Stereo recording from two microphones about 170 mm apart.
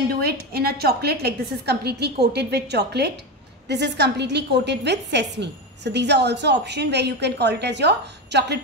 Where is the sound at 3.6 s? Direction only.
90° right.